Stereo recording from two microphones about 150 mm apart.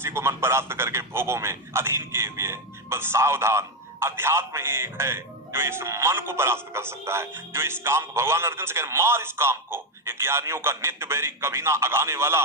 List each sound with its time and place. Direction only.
0.0 s a man's voice: 15° right (ahead or behind)